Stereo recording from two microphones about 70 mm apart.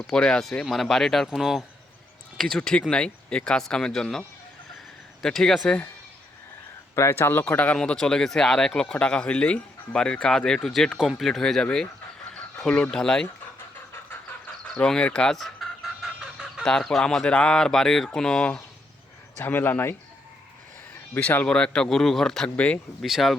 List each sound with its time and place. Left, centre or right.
0.1 s speech: centre
2.4 s speech: centre
5.2 s speech: centre
6.9 s speech: left
7.4 s speech: centre
7.8 s speech: centre
14.8 s chicken: centre
16.6 s speech: centre
19.5 s speech: left
21.2 s speech: left; by 22.4 s centre
22.4 s speech: centre
23.0 s speech: centre